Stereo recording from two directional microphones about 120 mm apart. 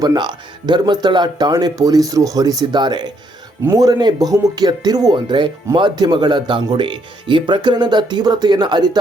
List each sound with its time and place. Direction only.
0.0 s speech: 35° right (ahead or behind)